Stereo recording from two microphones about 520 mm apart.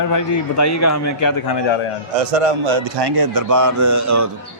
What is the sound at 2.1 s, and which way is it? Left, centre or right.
A man's voice, right.